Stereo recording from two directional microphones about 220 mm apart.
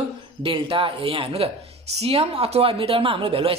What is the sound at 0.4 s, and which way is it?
A man's voice, 25° right (ahead or behind).